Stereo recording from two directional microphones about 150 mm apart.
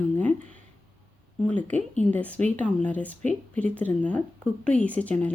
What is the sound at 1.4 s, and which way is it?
Speech, 10° left (ahead or behind).